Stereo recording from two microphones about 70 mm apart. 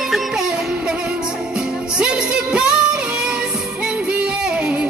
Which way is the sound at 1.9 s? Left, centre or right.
Centre.